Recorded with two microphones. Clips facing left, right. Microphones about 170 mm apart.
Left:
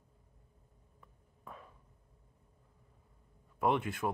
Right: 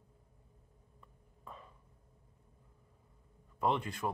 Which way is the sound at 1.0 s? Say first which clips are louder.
Left 1 dB; 5° left (ahead or behind).